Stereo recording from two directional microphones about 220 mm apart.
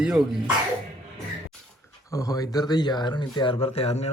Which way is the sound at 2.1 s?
15° left (ahead or behind).